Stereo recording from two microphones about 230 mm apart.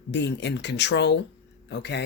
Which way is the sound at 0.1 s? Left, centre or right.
Left.